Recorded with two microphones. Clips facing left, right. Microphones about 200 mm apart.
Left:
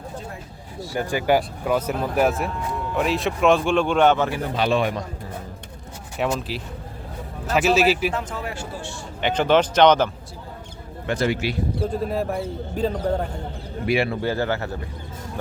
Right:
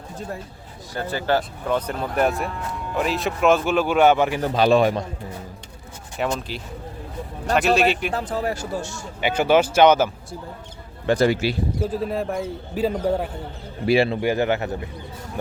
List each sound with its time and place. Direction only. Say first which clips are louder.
0.9 s speech: left 2 dB; 15° left (ahead or behind); by 4.4 s 10° right (ahead or behind)
4.5 s speech: right 6 dB; 40° right (ahead or behind)
6.1 s speech: left 1 dB; 5° left (ahead or behind)
8.1 s speech: right 4 dB; 35° right (ahead or behind)
9.2 s speech: right 1 dB; 10° right (ahead or behind)
11.0 s speech: right 4 dB; 35° right (ahead or behind)
11.8 s speech: left 2 dB; centre (ahead or behind)
13.8 s speech: right 4 dB; 30° right (ahead or behind)
14.2 s speech: right 3 dB; 15° right (ahead or behind)